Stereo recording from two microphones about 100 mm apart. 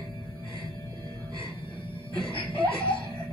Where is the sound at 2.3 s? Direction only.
60° left (ahead or behind).